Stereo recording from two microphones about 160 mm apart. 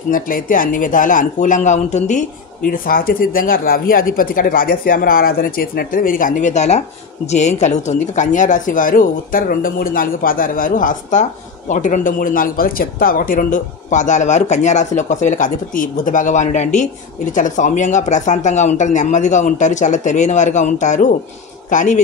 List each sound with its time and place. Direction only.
0.1 s speech: 60° left (ahead or behind)